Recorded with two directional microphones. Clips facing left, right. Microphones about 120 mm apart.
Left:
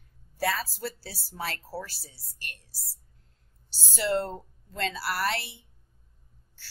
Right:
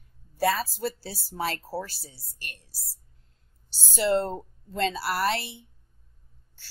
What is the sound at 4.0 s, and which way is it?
Speech, 25° right (ahead or behind).